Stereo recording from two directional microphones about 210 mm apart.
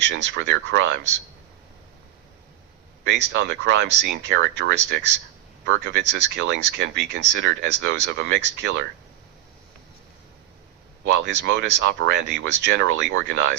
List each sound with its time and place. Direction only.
0.0 s speech: 55° right (ahead or behind)
3.0 s speech: 55° right (ahead or behind)
11.2 s speech: 60° right (ahead or behind)